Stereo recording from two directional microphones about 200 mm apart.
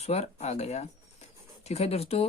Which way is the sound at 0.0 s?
30° left (ahead or behind).